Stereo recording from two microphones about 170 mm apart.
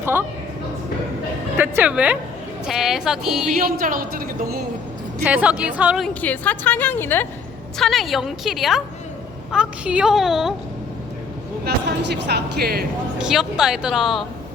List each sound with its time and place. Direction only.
0.0 s a sound: 15° right (ahead or behind)
1.5 s a woman's voice: 10° right (ahead or behind)
3.5 s a woman's voice: 60° right (ahead or behind)
5.2 s a woman's voice: 10° right (ahead or behind)
6.2 s a woman's voice: 10° left (ahead or behind)
7.8 s speech: centre (ahead or behind)
11.6 s speech: 80° right
13.1 s speech: 5° right (ahead or behind)